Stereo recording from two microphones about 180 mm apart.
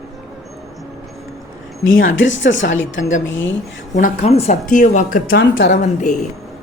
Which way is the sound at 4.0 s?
50° left (ahead or behind).